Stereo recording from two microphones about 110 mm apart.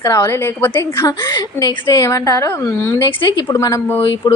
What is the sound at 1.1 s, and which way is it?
A woman's voice, 35° left (ahead or behind).